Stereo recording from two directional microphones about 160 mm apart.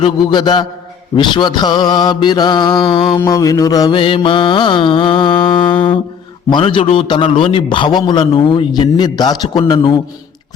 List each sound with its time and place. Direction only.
0.0 s a man's voice: 30° left (ahead or behind)